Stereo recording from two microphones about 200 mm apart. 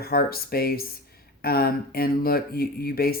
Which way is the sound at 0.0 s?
50° left (ahead or behind).